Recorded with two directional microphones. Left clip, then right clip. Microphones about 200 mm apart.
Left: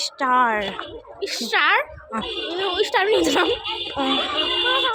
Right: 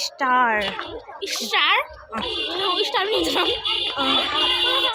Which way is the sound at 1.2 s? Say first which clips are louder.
Left 1 dB; 45° left (ahead or behind).